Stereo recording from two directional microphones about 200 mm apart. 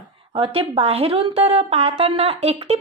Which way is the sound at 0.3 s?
25° right (ahead or behind).